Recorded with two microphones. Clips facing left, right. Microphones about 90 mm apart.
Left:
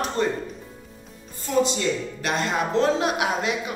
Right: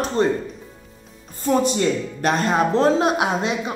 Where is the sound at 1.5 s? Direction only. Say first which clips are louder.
Right 4 dB; 45° right (ahead or behind).